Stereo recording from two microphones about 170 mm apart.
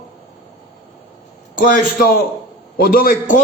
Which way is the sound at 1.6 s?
55° left (ahead or behind).